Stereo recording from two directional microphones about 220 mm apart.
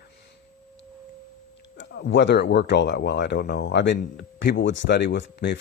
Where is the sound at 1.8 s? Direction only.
50° left (ahead or behind).